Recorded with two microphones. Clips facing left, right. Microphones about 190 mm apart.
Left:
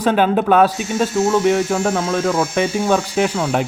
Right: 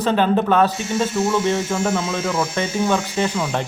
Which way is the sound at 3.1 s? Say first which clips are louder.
Left 4 dB; 10° left (ahead or behind).